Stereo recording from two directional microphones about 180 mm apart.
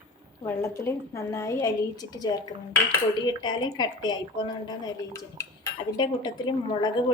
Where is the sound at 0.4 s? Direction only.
15° left (ahead or behind).